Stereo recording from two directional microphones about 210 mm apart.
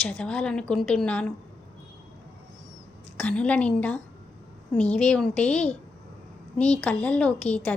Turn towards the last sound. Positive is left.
turn(degrees=5)  # may be behind; listen again after turning